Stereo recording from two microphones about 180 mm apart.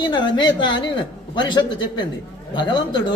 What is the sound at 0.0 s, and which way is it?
A man's voice, 25° left (ahead or behind).